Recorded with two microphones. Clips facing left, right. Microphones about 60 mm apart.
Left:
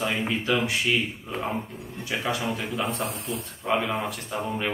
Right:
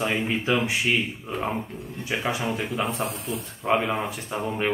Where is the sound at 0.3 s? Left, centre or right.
Centre.